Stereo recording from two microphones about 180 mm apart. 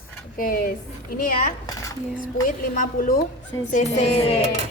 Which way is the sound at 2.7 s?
50° left (ahead or behind).